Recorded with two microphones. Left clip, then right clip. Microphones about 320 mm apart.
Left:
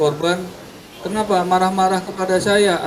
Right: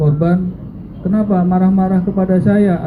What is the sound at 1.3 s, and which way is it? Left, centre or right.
Speech, left.